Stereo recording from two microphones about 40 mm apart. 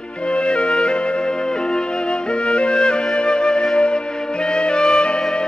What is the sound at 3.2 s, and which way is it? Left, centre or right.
Flute, left.